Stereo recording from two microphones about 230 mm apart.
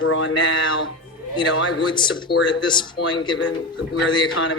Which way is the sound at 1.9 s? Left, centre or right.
Centre.